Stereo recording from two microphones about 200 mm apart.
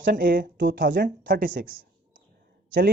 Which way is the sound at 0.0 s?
45° right (ahead or behind).